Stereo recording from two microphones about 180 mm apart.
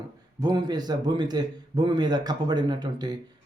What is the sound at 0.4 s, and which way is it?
A man's voice, 25° right (ahead or behind).